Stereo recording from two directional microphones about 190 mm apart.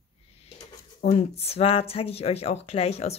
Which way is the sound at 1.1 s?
30° left (ahead or behind).